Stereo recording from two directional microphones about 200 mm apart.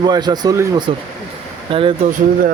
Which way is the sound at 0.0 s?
20° right (ahead or behind).